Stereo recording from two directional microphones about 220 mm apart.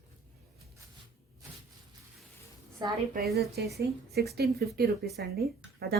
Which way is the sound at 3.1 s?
45° right (ahead or behind).